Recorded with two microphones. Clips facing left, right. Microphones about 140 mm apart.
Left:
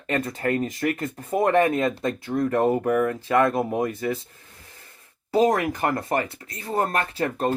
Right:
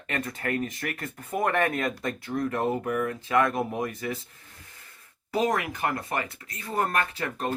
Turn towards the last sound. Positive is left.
turn(degrees=35)  # may be behind; listen again after turning